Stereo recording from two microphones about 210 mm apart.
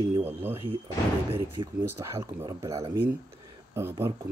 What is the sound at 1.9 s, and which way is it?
Speech, 15° right (ahead or behind).